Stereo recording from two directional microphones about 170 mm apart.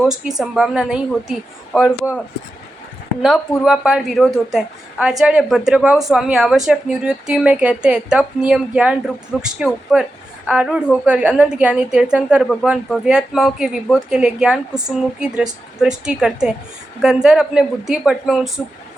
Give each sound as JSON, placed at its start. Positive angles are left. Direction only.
{"t": 0.0, "sound": "a woman's voice", "side_deg": -5}
{"t": 3.2, "sound": "a woman's voice", "side_deg": 0}